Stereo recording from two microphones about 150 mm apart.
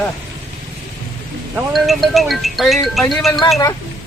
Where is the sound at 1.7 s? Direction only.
Centre (ahead or behind).